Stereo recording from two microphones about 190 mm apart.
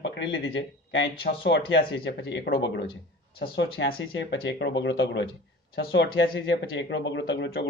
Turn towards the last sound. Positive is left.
turn(degrees=70)  # may be behind; listen again after turning